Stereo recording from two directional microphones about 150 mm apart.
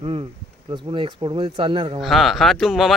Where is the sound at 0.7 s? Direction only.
35° right (ahead or behind).